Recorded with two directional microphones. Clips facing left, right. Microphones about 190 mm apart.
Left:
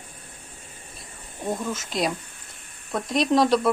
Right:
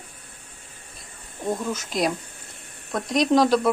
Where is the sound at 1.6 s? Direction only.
Centre (ahead or behind).